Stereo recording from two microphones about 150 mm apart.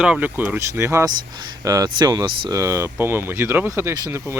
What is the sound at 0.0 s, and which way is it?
Speech, 10° right (ahead or behind).